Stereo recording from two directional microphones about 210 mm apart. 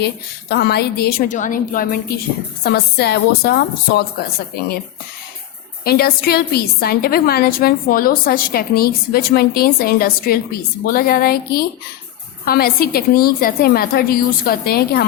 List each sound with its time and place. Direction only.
0.0 s a woman's voice: 50° left (ahead or behind)
5.8 s a woman's voice: 45° left (ahead or behind)